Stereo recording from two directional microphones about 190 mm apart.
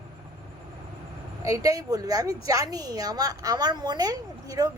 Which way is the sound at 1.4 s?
15° right (ahead or behind).